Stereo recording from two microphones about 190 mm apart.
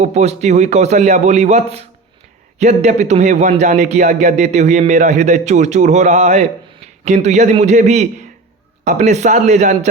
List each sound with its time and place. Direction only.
0.0 s a man's voice: 35° right (ahead or behind)